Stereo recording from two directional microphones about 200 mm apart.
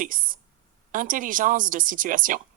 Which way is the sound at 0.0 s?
45° right (ahead or behind).